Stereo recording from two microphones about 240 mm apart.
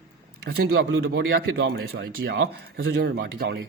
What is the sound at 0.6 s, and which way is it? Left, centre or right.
Speech, right.